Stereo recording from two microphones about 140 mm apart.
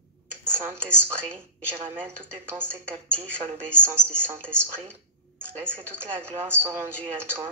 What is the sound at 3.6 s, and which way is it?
Speech, 15° right (ahead or behind).